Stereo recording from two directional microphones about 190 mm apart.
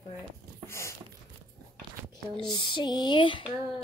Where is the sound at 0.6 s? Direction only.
15° left (ahead or behind).